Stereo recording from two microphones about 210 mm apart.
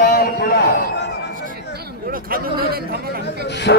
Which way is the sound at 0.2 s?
45° left (ahead or behind).